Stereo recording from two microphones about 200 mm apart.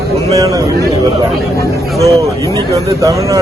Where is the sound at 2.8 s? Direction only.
15° right (ahead or behind).